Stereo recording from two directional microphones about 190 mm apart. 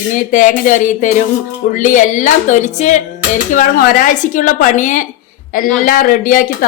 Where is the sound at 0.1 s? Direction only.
45° left (ahead or behind).